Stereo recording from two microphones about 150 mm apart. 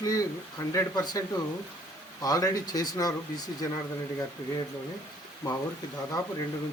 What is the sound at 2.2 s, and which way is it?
Speech, 25° left (ahead or behind).